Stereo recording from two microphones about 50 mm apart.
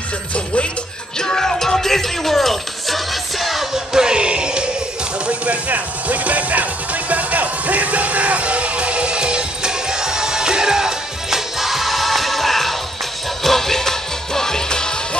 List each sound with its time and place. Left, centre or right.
1.2 s music: centre
3.9 s music: centre